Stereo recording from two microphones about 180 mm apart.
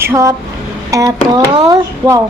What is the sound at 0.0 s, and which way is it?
A woman's voice, 15° right (ahead or behind).